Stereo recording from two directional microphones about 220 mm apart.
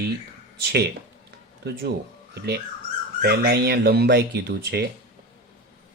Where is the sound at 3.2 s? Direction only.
45° right (ahead or behind).